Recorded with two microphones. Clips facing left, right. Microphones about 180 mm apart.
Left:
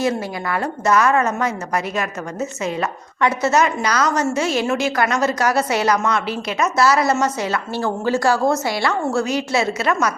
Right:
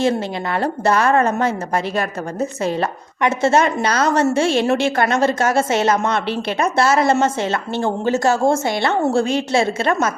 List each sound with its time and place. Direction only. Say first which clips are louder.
0.0 s a woman's voice: right 2 dB; 30° right (ahead or behind)